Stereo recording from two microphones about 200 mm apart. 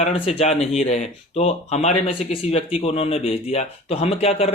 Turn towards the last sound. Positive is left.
turn(degrees=30)  # may be behind; listen again after turning